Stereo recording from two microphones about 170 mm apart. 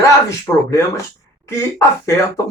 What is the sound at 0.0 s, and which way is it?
Speech, 20° left (ahead or behind).